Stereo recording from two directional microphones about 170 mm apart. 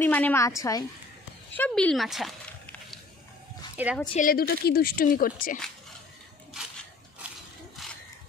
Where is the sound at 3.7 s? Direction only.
10° right (ahead or behind).